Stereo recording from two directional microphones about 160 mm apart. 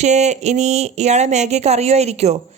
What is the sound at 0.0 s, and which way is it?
A woman's voice, 45° right (ahead or behind).